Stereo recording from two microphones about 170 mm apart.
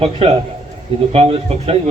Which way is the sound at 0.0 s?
35° right (ahead or behind).